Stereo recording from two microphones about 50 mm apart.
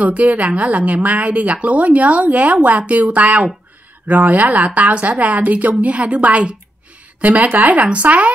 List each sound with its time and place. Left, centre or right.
0.0 s speech: right